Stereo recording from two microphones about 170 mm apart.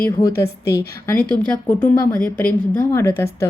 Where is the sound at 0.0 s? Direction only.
20° left (ahead or behind).